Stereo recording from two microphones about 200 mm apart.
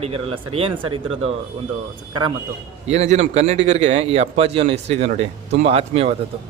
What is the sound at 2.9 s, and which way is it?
A man's voice, 35° right (ahead or behind).